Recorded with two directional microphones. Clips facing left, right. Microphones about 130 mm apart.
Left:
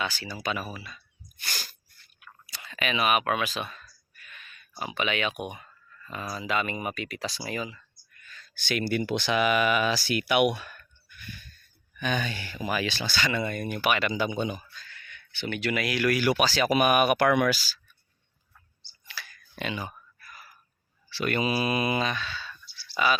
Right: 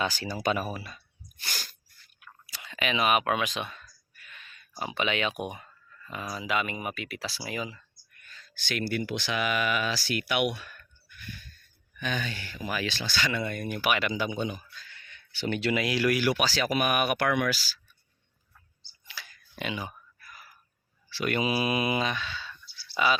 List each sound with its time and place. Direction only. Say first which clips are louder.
0.0 s speech: right 3 dB; 40° right (ahead or behind)
2.5 s a sound: even; 15° right (ahead or behind)
6.1 s speech: left 1 dB; 10° right (ahead or behind)
8.6 s speech: left 3 dB; 15° left (ahead or behind)
12.1 s speech: left 4 dB; 15° left (ahead or behind); by 14.3 s 5° right (ahead or behind)
14.8 s a sound: left 3 dB; 30° right (ahead or behind)
15.7 s speech: left 1 dB; 25° right (ahead or behind)
16.2 s speech: left 2 dB; centre (ahead or behind)
16.8 s speech: left 6 dB; 10° left (ahead or behind)
17.2 s speech: left 4 dB; 25° left (ahead or behind)
19.0 s a sound: left 2 dB; 20° right (ahead or behind)
21.2 s speech: left 1 dB; 10° right (ahead or behind)